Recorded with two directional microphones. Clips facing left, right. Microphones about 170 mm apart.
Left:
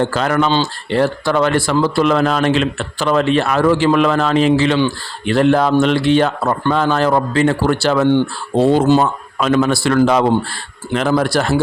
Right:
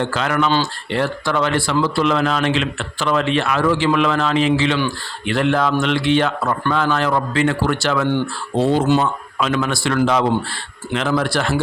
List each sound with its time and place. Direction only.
0.0 s speech: 40° left (ahead or behind)